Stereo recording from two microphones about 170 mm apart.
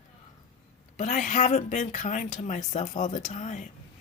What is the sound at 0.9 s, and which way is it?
Speech, 45° left (ahead or behind).